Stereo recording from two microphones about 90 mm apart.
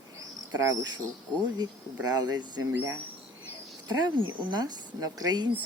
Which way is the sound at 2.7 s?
25° right (ahead or behind).